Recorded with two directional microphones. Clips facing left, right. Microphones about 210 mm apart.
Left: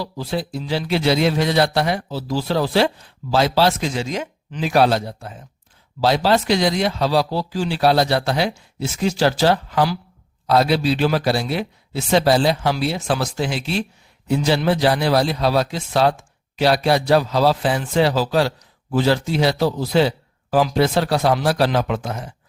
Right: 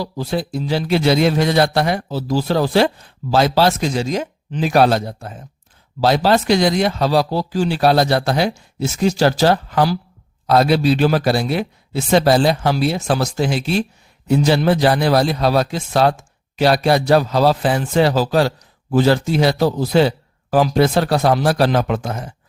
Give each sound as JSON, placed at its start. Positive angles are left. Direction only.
{"t": 0.0, "sound": "a man's voice", "side_deg": -45}